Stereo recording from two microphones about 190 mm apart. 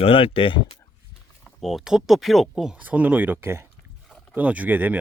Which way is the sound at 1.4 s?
Centre (ahead or behind).